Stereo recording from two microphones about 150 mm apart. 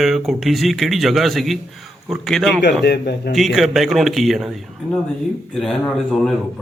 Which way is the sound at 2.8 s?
90° left.